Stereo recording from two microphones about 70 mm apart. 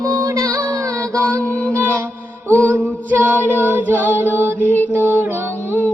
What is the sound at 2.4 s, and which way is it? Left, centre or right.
Female singing, right.